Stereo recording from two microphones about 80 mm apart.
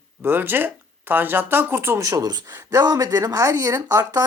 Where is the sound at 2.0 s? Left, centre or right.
Right.